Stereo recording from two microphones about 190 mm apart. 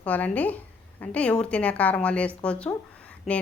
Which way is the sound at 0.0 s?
10° left (ahead or behind).